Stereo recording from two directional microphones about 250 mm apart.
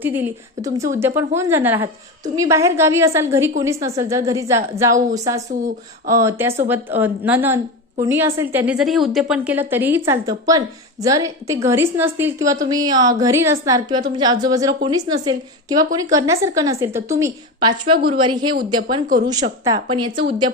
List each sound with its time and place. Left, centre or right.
0.0 s a woman's voice: centre
19.0 s a woman's voice: right
19.3 s a woman's voice: centre